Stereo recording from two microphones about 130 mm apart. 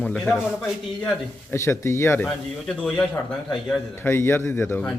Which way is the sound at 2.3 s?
5° left (ahead or behind).